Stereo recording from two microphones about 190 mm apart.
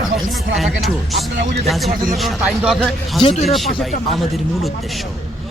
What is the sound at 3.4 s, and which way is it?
Speech, centre (ahead or behind).